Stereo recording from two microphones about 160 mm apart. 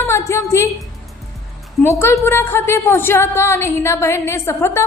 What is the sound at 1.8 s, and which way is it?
A woman's voice, 15° left (ahead or behind).